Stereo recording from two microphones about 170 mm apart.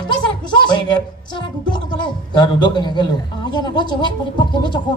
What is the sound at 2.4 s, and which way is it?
A man's voice, 25° left (ahead or behind).